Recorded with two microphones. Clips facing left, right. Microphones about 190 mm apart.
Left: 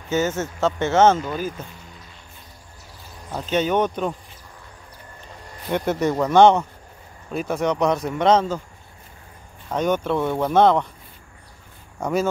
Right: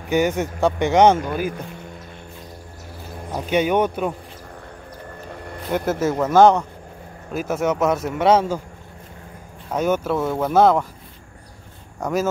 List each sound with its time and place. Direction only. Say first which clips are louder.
0.1 s speech: right 3 dB; 15° right (ahead or behind)
3.3 s speech: right 2 dB; 10° right (ahead or behind)
5.3 s a sound: right 7 dB; 60° right (ahead or behind)
5.7 s speech: even; 5° right (ahead or behind)
9.7 s speech: right 1 dB; 5° right (ahead or behind)
12.0 s speech: even; centre (ahead or behind)